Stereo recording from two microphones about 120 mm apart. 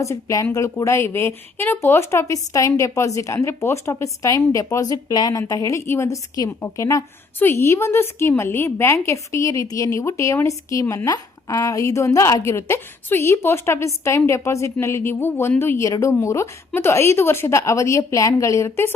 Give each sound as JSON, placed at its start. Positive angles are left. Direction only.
{"t": 0.0, "sound": "speech", "side_deg": 25}